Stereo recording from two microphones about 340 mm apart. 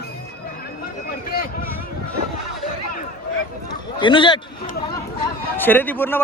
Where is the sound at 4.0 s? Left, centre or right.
Centre.